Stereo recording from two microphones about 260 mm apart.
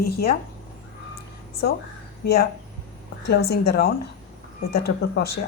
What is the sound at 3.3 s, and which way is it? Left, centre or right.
Speech, left.